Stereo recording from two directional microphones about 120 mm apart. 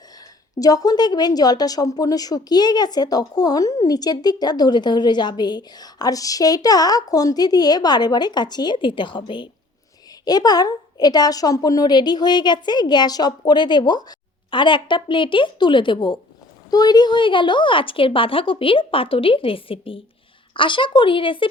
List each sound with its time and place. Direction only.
0.6 s a woman's voice: 30° left (ahead or behind)